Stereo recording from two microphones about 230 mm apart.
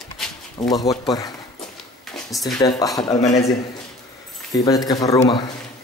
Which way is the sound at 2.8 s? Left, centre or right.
Centre.